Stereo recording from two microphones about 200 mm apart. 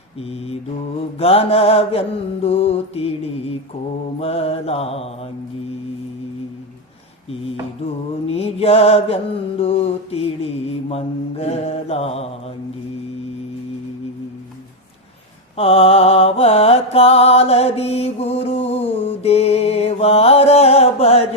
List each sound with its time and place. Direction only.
0.2 s mantra: 30° left (ahead or behind)
8.3 s mantra: 30° left (ahead or behind)
15.5 s mantra: 30° left (ahead or behind)